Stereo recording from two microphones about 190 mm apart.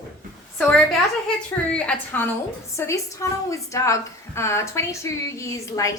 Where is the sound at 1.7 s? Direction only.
5° left (ahead or behind).